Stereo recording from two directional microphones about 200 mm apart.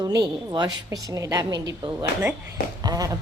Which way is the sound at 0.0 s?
20° right (ahead or behind).